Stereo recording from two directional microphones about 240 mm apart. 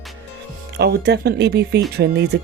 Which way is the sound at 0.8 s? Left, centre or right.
Right.